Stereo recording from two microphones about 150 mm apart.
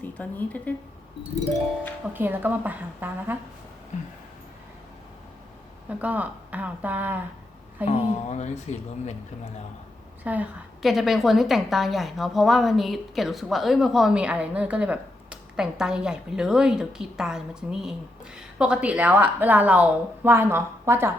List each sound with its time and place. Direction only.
0.1 s a woman's voice: 10° left (ahead or behind)
2.1 s a woman's voice: 15° right (ahead or behind)
6.0 s a woman's voice: 10° right (ahead or behind)
7.9 s a woman's voice: 50° left (ahead or behind)
10.2 s a woman's voice: 10° right (ahead or behind)